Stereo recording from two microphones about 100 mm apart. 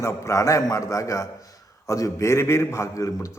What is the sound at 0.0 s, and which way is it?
A man's voice, 30° left (ahead or behind).